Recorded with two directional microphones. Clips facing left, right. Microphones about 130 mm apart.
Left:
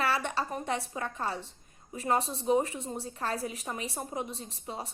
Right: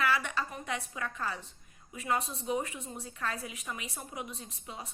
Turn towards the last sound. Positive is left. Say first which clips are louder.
# left 5 dB
turn(degrees=30)  # may be behind; listen again after turning